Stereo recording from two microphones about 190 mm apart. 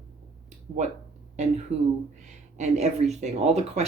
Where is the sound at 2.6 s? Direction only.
35° right (ahead or behind).